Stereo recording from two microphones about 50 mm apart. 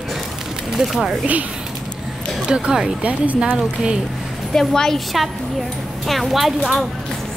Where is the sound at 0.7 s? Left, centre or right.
Centre.